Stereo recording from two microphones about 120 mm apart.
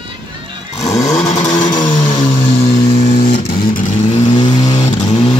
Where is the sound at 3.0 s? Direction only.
70° left (ahead or behind).